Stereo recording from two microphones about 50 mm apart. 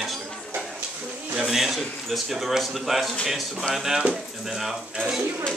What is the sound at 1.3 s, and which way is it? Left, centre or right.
Speech, centre.